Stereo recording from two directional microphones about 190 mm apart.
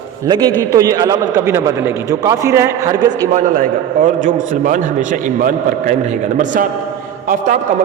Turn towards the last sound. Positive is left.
turn(degrees=-45)  # may be behind; listen again after turning